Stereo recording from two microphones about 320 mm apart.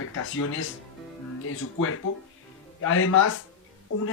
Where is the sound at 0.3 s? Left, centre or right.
Left.